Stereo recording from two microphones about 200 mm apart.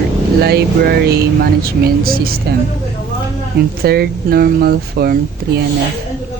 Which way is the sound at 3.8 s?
50° right (ahead or behind).